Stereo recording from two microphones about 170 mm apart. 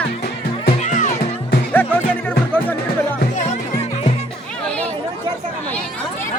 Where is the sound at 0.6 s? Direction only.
45° left (ahead or behind).